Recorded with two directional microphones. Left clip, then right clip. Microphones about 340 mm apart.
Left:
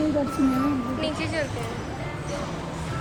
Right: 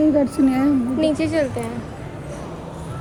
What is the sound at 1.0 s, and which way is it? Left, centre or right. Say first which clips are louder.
Speech: right 8 dB; centre.